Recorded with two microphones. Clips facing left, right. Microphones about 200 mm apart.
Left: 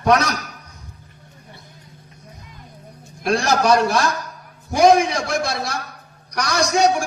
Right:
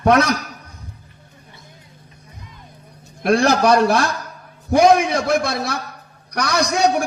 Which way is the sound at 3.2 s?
55° right (ahead or behind).